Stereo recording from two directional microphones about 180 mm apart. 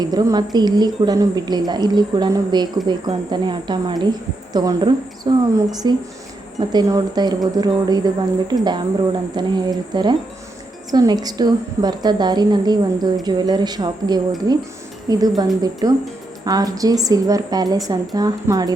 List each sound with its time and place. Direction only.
0.0 s speech: 20° right (ahead or behind)